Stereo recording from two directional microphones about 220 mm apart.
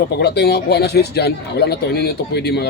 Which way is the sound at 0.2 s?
50° left (ahead or behind).